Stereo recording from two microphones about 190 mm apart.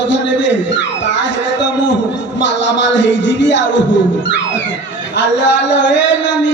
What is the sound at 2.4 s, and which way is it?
Music, 70° left (ahead or behind).